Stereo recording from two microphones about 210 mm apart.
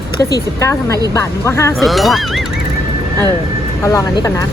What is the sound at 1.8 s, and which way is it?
Speech, centre (ahead or behind).